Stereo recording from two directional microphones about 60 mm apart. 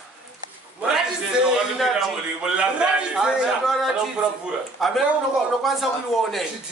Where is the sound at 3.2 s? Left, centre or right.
Centre.